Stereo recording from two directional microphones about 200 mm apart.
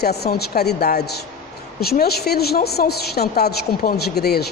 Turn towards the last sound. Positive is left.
turn(degrees=55)  # may be behind; listen again after turning